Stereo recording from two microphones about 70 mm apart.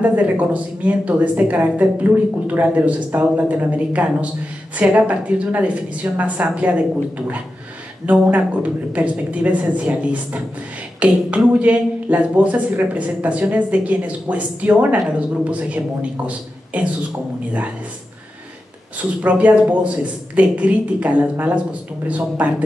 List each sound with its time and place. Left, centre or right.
0.0 s a woman's voice: right
18.9 s a woman's voice: right